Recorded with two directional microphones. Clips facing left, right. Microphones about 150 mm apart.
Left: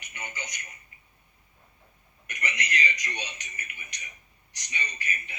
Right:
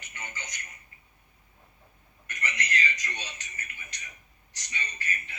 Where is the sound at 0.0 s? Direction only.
15° left (ahead or behind).